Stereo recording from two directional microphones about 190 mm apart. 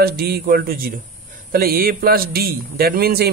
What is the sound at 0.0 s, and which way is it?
A man's voice, 55° right (ahead or behind).